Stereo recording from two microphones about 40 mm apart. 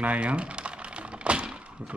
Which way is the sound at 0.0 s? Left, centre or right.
Right.